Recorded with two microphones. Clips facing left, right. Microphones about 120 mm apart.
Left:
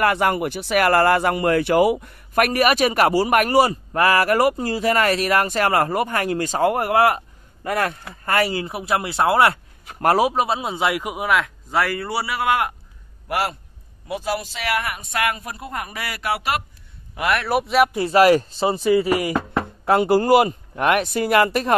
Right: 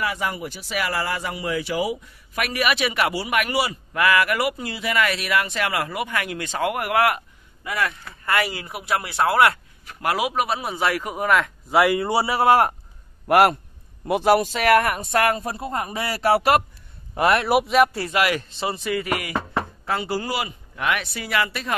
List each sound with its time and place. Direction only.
0.0 s speech: 60° left (ahead or behind); by 7.2 s 30° left (ahead or behind)
7.6 s speech: 45° left (ahead or behind)
8.1 s speech: 35° left (ahead or behind)
9.9 s speech: 40° left (ahead or behind); by 11.2 s 15° left (ahead or behind)
11.2 s speech: centre (ahead or behind)
11.7 s a man's voice: 15° right (ahead or behind); by 12.7 s 35° right (ahead or behind)
13.3 s a man's voice: 60° right (ahead or behind); by 16.6 s 40° right (ahead or behind)
17.1 s a man's voice: 30° right (ahead or behind)
17.6 s speech: centre (ahead or behind)
18.1 s speech: 35° left (ahead or behind)
19.8 s speech: 55° left (ahead or behind)